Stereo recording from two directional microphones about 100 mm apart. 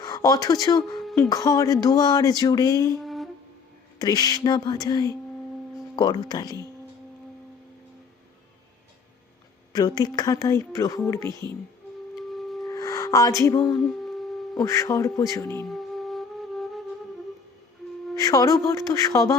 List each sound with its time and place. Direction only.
0.0 s speech: 40° left (ahead or behind)
3.0 s music: centre (ahead or behind)
4.0 s speech: 40° left (ahead or behind)
9.7 s speech: 40° left (ahead or behind)
12.3 s music: centre (ahead or behind)
12.6 s music: 35° left (ahead or behind)
13.8 s a sound: 5° left (ahead or behind)
14.6 s speech: 30° left (ahead or behind)
15.6 s music: centre (ahead or behind)
18.2 s speech: 35° left (ahead or behind)